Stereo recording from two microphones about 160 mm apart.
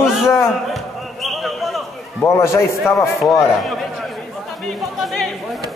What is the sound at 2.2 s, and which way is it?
Speech, 15° left (ahead or behind).